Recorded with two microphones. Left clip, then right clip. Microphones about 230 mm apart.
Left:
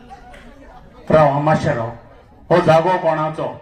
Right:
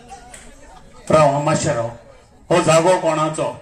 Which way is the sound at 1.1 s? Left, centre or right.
Right.